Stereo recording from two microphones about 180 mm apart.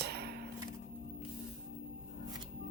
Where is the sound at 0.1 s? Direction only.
65° right (ahead or behind).